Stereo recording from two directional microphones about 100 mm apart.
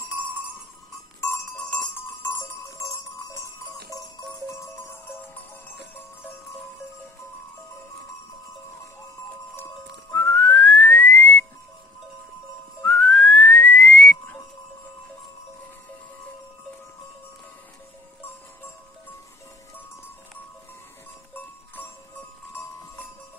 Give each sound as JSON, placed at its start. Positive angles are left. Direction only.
{"t": 2.2, "sound": "jingle bell", "side_deg": 30}
{"t": 10.1, "sound": "whistling", "side_deg": 15}
{"t": 12.8, "sound": "whistling", "side_deg": 5}